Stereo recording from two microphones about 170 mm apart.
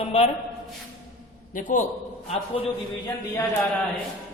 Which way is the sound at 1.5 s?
50° left (ahead or behind).